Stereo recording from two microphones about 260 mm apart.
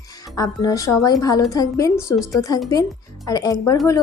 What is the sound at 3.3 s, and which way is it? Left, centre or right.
Speech, centre.